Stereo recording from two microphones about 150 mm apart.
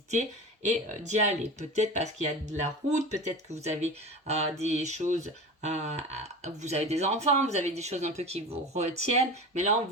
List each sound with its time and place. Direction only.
0.1 s speech: 50° right (ahead or behind)